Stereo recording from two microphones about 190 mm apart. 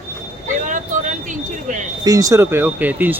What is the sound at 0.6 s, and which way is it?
Vehicle, 40° right (ahead or behind).